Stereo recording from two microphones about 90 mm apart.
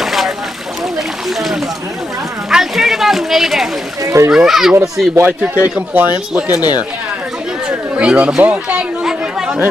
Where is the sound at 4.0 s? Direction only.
40° right (ahead or behind).